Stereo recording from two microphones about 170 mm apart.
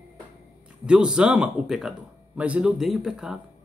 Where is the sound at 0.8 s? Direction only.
5° right (ahead or behind).